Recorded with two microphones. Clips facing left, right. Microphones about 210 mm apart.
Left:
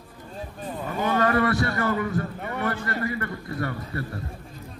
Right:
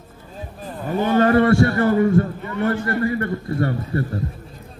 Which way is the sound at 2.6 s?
55° right (ahead or behind).